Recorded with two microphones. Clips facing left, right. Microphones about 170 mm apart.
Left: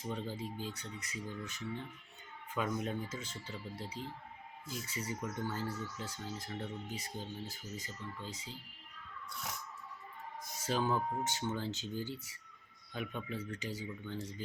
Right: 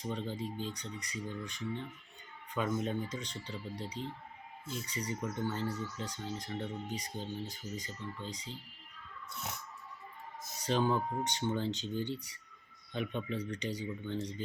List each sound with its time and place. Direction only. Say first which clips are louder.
0.0 s speech: right 2 dB; 5° left (ahead or behind)
9.2 s a sound: right 2 dB; 25° right (ahead or behind)
10.6 s speech: right 3 dB; 5° left (ahead or behind)
14.0 s speech: right 5 dB; 20° right (ahead or behind)